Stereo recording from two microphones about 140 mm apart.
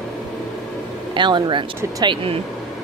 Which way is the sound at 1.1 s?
35° right (ahead or behind).